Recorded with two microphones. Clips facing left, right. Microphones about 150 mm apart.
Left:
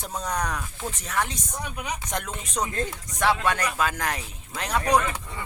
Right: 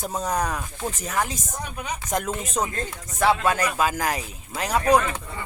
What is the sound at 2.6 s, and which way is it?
Speech, 25° right (ahead or behind).